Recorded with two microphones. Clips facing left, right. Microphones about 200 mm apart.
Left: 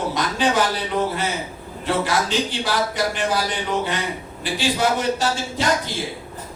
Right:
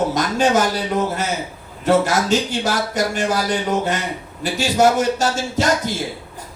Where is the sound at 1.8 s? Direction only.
45° right (ahead or behind).